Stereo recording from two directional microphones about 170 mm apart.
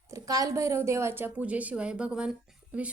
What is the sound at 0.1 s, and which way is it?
A woman's voice, 20° right (ahead or behind).